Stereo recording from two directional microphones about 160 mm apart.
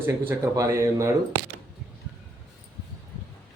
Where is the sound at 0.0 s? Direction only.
15° right (ahead or behind).